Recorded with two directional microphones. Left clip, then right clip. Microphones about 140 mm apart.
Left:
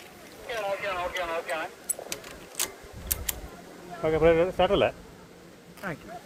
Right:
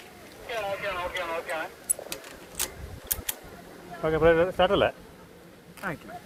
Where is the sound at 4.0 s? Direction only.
Centre (ahead or behind).